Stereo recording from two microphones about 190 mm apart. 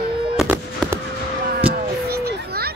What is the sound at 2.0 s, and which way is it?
Children playing, 55° right (ahead or behind).